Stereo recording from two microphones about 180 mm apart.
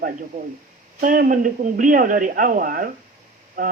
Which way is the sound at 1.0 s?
50° right (ahead or behind).